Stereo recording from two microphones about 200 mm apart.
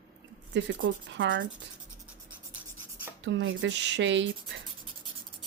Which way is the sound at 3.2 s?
65° right (ahead or behind).